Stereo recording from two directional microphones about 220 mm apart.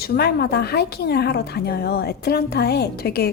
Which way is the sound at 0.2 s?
45° left (ahead or behind).